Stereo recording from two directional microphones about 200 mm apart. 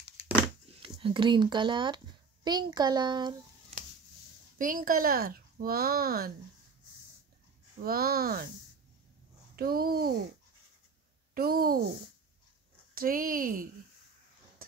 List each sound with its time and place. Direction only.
0.7 s a child's voice: 25° right (ahead or behind)
4.6 s speech: 45° right (ahead or behind)
7.8 s speech: 50° right (ahead or behind)
9.6 s speech: 50° right (ahead or behind)
11.3 s speech: 50° right (ahead or behind)
12.9 s speech: 45° right (ahead or behind)